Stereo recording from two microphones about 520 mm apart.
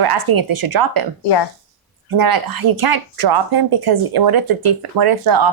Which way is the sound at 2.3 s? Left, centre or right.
Right.